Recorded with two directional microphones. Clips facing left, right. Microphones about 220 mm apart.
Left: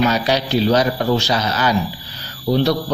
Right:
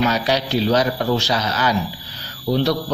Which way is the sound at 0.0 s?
25° left (ahead or behind).